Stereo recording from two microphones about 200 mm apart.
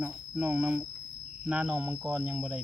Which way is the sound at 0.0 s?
5° right (ahead or behind).